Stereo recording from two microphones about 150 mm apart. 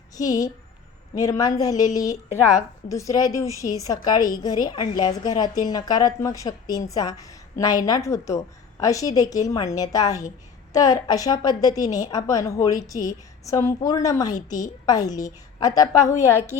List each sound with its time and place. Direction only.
0.2 s a woman's voice: 25° left (ahead or behind)
2.3 s a woman's voice: 60° left (ahead or behind)
2.9 s a woman's voice: 20° left (ahead or behind)